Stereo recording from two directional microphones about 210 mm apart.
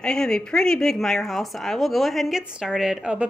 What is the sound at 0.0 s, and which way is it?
A woman's voice, 5° left (ahead or behind).